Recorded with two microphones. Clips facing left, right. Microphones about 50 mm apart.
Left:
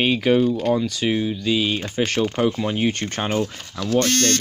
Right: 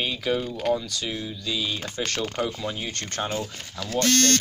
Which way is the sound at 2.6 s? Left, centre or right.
Left.